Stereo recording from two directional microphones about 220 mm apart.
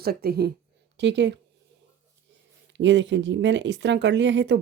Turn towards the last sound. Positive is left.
turn(degrees=-55)  # may be behind; listen again after turning